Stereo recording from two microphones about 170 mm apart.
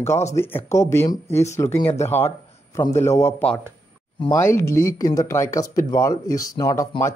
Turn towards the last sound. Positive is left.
turn(degrees=20)  # may be behind; listen again after turning